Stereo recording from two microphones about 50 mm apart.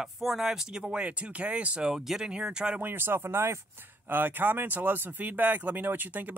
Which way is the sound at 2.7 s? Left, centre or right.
Right.